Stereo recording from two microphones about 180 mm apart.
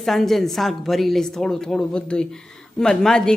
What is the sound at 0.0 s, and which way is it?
Speech, centre (ahead or behind).